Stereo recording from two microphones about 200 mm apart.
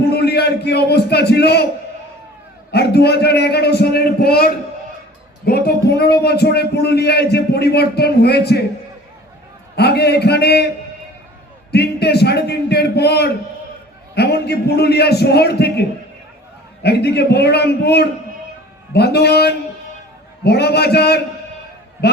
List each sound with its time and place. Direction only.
0.1 s a sound: 55° left (ahead or behind)
2.7 s a man's voice: 55° left (ahead or behind)
9.7 s a man's voice: 55° left (ahead or behind)
11.7 s a man's voice: 55° left (ahead or behind)